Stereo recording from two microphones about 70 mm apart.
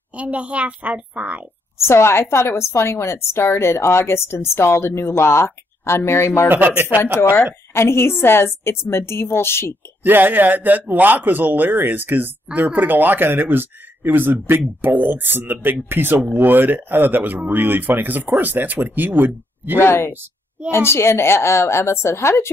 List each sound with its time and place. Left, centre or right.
0.1 s a woman's voice: centre
1.8 s a woman's voice: left
6.5 s speech: right
7.7 s a woman's voice: left
10.0 s speech: right
19.8 s a woman's voice: left